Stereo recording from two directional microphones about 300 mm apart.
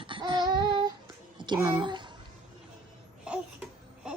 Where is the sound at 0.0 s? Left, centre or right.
Centre.